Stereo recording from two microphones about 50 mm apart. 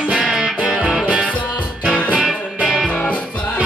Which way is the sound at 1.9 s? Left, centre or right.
Left.